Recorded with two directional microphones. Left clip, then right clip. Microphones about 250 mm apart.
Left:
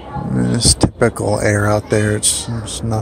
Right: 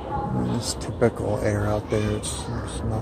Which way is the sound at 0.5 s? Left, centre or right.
Left.